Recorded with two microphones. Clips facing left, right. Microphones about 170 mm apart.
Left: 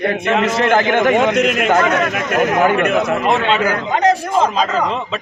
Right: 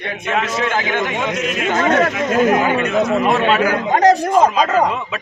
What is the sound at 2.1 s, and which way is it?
Speech, 70° left (ahead or behind).